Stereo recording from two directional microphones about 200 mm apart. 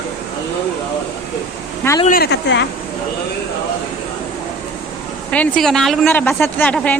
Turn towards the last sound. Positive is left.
turn(degrees=5)  # may be behind; listen again after turning